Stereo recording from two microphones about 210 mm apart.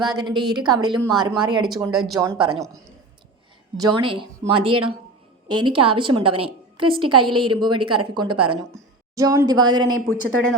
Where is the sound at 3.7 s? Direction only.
20° right (ahead or behind).